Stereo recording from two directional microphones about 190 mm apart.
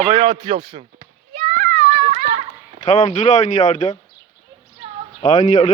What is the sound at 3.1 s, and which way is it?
Speech, 40° left (ahead or behind).